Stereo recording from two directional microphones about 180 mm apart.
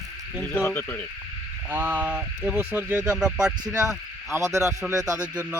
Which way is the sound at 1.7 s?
10° right (ahead or behind).